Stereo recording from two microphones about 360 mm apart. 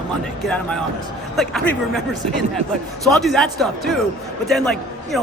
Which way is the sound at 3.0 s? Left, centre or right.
Centre.